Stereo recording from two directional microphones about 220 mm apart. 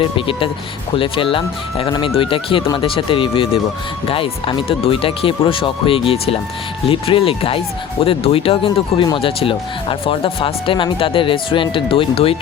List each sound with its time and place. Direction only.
0.0 s speech: 25° left (ahead or behind)